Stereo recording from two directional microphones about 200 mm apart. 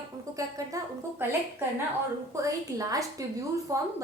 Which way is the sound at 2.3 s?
15° right (ahead or behind).